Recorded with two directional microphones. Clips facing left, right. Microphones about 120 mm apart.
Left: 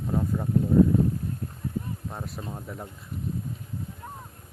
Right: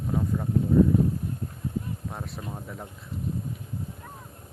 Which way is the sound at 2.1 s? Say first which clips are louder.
Even; centre (ahead or behind).